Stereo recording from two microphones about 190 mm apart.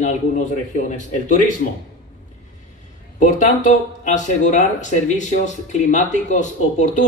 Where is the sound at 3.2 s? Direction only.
40° left (ahead or behind).